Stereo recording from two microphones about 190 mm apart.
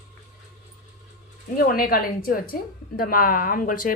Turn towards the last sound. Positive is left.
turn(degrees=45)  # may be behind; listen again after turning